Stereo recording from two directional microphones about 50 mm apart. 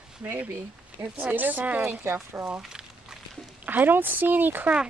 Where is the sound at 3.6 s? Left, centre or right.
Right.